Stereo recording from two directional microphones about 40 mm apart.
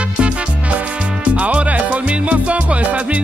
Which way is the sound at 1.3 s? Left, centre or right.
Right.